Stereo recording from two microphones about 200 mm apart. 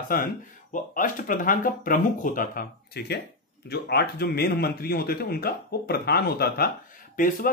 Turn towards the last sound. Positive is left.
turn(degrees=45)  # may be behind; listen again after turning